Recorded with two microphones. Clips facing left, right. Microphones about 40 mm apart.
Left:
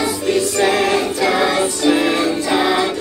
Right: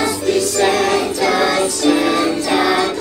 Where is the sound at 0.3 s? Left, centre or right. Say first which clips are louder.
Even; left.